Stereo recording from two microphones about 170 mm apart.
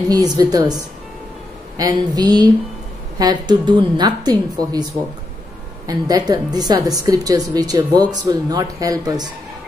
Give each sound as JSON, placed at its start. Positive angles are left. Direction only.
{"t": 0.1, "sound": "speech", "side_deg": -25}
{"t": 1.8, "sound": "speech", "side_deg": -20}
{"t": 5.9, "sound": "speech", "side_deg": -20}